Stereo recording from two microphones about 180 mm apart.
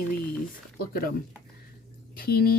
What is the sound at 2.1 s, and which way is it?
Speech, 60° left (ahead or behind).